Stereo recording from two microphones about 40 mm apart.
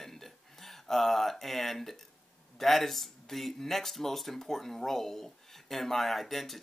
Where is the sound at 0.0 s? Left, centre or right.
Centre.